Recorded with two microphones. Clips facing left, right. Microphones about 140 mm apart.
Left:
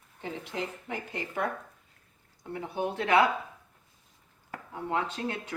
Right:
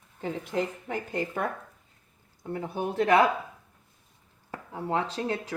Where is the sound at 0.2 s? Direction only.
45° right (ahead or behind).